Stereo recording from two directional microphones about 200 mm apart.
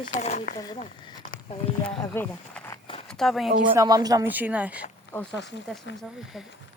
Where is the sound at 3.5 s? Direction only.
45° right (ahead or behind).